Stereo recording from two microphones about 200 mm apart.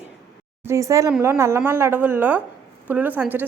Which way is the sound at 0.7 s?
15° right (ahead or behind).